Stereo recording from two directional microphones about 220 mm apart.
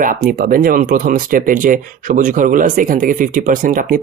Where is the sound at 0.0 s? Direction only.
40° right (ahead or behind).